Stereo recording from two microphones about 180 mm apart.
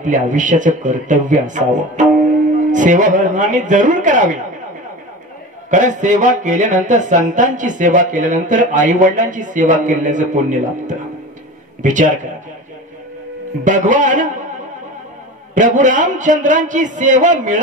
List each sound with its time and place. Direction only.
0.0 s speech: 45° right (ahead or behind)
5.7 s speech: 45° right (ahead or behind)
13.7 s speech: 45° right (ahead or behind)
15.5 s speech: 45° right (ahead or behind)